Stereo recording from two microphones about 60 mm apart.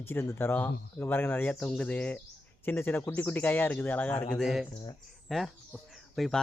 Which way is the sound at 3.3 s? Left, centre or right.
Left.